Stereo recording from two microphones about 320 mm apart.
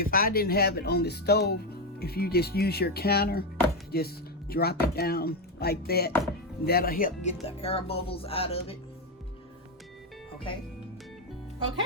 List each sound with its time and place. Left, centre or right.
0.0 s speech: left